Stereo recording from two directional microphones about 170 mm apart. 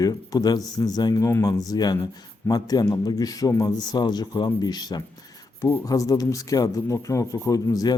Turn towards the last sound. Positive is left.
turn(degrees=20)  # may be behind; listen again after turning